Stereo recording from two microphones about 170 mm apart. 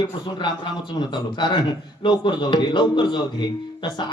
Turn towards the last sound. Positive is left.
turn(degrees=25)  # may be behind; listen again after turning